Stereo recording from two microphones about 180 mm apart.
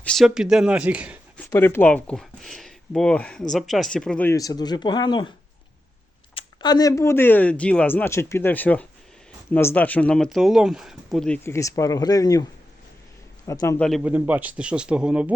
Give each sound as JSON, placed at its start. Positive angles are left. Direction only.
{"t": 0.0, "sound": "speech", "side_deg": 0}
{"t": 1.5, "sound": "speech", "side_deg": 15}
{"t": 6.3, "sound": "speech", "side_deg": 25}
{"t": 11.4, "sound": "speech", "side_deg": 15}
{"t": 13.5, "sound": "speech", "side_deg": 15}
{"t": 13.7, "sound": "speech", "side_deg": 5}
{"t": 14.0, "sound": "a man's voice", "side_deg": -10}